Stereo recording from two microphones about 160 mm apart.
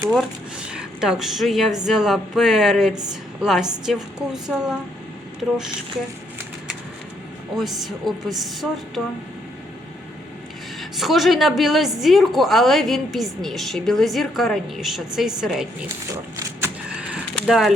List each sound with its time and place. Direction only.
0.1 s a woman's voice: 5° right (ahead or behind)
7.5 s a woman's voice: centre (ahead or behind)
10.8 s a woman's voice: centre (ahead or behind)
16.1 s a sound: 15° right (ahead or behind)
17.3 s speech: centre (ahead or behind)